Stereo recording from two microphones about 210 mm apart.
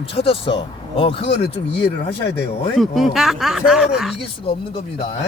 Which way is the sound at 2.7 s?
Centre (ahead or behind).